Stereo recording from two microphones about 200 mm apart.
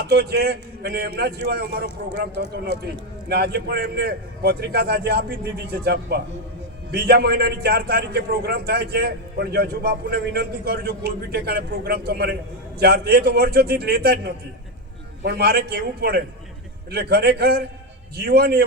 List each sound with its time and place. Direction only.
0.0 s a man's voice: 55° right (ahead or behind)